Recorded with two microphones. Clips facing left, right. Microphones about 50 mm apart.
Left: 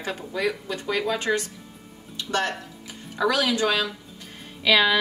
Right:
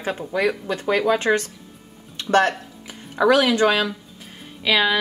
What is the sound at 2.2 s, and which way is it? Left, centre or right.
Music, right.